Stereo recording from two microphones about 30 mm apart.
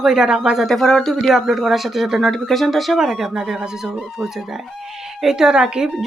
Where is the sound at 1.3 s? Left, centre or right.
Centre.